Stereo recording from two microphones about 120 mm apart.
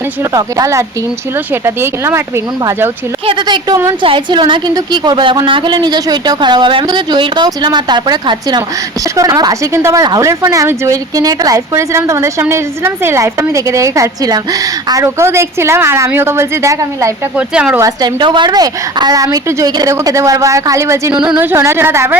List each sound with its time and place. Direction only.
0.2 s speech: 25° right (ahead or behind)
3.2 s a woman's voice: 40° right (ahead or behind)
17.3 s speech: 10° right (ahead or behind)
17.7 s speech: 30° right (ahead or behind)
18.2 s speech: 40° right (ahead or behind); by 21.1 s 25° right (ahead or behind)
21.1 s speech: 5° right (ahead or behind)
21.3 s speech: 20° right (ahead or behind)